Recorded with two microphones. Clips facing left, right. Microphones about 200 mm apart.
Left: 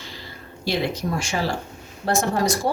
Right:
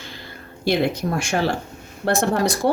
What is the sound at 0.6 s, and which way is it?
Speech, 55° right (ahead or behind).